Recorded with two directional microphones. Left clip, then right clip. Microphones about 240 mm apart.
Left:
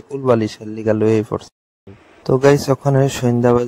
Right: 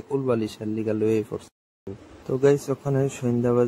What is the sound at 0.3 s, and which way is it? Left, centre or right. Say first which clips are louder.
Speech: left 14 dB; left.